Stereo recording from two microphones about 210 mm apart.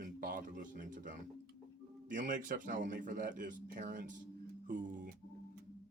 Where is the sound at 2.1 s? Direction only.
40° right (ahead or behind).